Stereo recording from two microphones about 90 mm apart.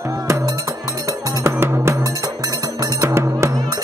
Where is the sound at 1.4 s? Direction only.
30° right (ahead or behind).